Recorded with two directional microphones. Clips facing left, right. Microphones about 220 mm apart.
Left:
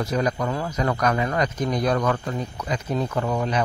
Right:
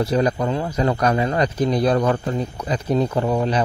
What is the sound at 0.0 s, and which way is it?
A man's voice, 30° right (ahead or behind).